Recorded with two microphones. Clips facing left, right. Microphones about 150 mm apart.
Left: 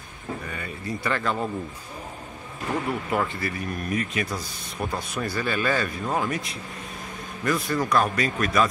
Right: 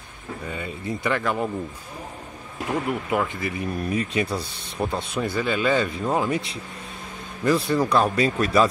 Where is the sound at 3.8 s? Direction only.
30° right (ahead or behind).